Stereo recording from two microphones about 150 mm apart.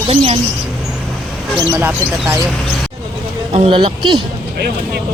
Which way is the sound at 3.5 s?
40° right (ahead or behind).